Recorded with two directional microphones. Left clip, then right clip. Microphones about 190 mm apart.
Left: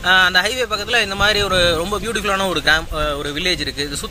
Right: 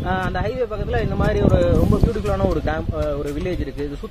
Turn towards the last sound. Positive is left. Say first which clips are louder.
# left 6 dB
turn(degrees=5)  # may be behind; listen again after turning